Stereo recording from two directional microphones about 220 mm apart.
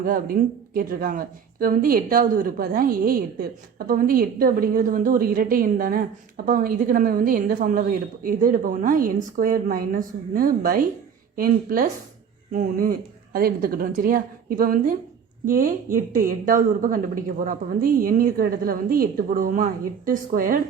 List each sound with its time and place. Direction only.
0.0 s speech: 40° right (ahead or behind)
16.1 s speech: 40° right (ahead or behind)